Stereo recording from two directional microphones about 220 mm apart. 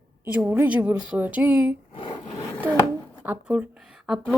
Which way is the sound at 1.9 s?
20° left (ahead or behind).